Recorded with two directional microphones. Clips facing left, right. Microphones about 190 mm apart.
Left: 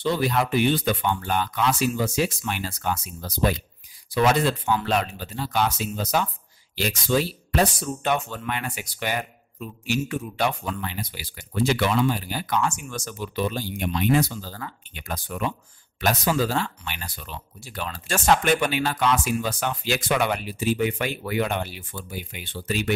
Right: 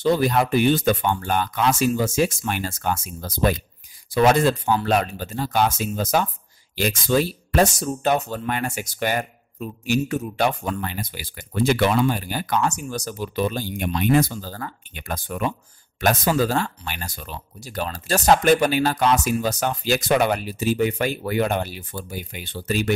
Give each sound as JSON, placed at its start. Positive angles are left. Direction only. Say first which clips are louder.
{"t": 0.0, "sound": "speech", "louder": "right 4 dB", "side_deg": -45}